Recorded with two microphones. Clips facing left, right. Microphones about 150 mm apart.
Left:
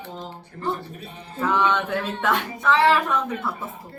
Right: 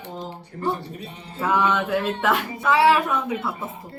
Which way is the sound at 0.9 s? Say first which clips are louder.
Right 2 dB; 45° left (ahead or behind).